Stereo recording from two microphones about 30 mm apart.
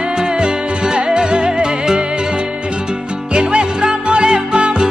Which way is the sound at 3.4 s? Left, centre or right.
Right.